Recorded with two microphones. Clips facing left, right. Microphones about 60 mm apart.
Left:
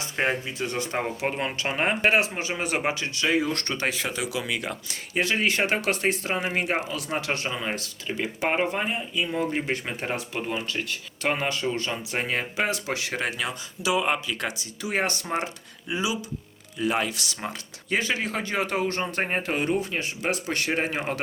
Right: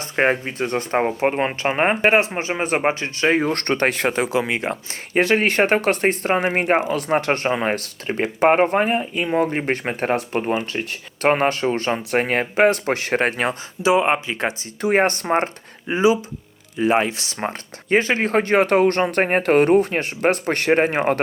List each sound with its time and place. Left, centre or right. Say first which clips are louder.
0.0 s speech: right 7 dB; right
13.8 s speech: right 7 dB; right